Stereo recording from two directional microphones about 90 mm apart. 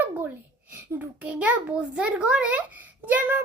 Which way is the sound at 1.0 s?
15° right (ahead or behind).